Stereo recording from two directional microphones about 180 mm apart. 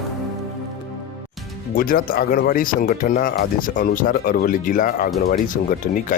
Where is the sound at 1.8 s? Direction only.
50° left (ahead or behind).